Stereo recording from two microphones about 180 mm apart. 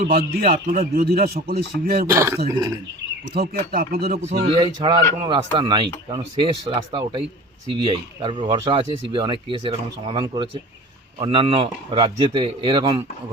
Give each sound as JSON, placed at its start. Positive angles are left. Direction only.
{"t": 0.1, "sound": "speech", "side_deg": -55}
{"t": 2.0, "sound": "speech", "side_deg": -15}
{"t": 3.2, "sound": "speech", "side_deg": -65}
{"t": 4.2, "sound": "a man's voice", "side_deg": -40}
{"t": 4.5, "sound": "speech", "side_deg": -20}